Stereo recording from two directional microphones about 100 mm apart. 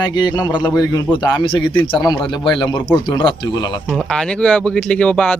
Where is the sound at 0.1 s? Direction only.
40° left (ahead or behind).